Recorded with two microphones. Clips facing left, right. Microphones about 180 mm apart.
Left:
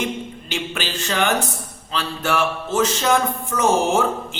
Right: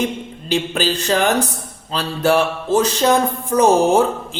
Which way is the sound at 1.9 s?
35° right (ahead or behind).